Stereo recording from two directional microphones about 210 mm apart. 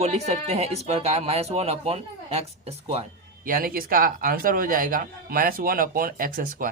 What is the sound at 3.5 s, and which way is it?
Speech, 45° right (ahead or behind).